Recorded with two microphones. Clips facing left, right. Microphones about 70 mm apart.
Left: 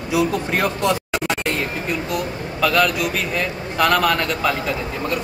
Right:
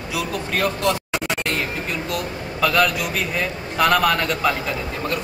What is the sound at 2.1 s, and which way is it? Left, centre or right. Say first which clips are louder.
A man's voice: left 2 dB; centre.